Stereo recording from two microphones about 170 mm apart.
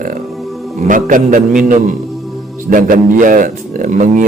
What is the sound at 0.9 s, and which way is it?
A man's voice, 50° right (ahead or behind).